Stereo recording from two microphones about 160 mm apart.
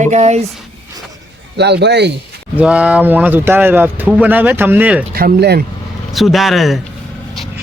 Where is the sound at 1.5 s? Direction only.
90° right.